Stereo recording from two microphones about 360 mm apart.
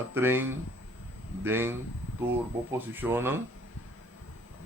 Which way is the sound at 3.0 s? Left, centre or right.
Centre.